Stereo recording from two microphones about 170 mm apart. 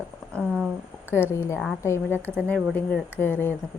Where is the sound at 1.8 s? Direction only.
15° left (ahead or behind).